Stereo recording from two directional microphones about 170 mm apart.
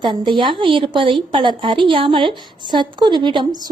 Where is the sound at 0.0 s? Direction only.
30° right (ahead or behind).